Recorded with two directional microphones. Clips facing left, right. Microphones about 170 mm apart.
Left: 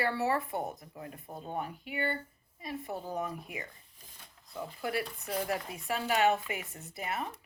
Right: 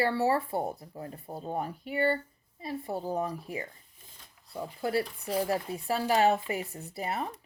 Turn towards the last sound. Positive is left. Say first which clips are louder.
# right 3 dB
turn(degrees=-35)  # may be behind; listen again after turning